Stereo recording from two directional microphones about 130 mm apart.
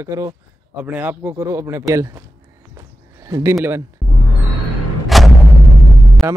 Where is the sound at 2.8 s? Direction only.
25° right (ahead or behind).